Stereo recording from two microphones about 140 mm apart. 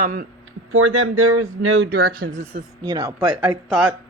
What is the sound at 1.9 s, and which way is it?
Speech, 90° right.